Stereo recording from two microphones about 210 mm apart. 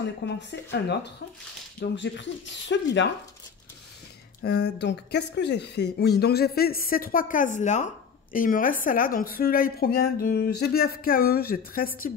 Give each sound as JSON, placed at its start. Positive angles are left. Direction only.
{"t": 0.0, "sound": "speech", "side_deg": 55}
{"t": 4.4, "sound": "speech", "side_deg": 50}